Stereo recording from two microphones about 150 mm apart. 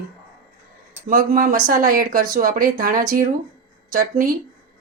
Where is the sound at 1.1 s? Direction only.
70° right (ahead or behind).